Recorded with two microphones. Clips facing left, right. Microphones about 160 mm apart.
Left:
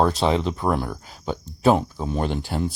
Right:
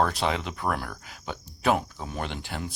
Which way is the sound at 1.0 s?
35° left (ahead or behind).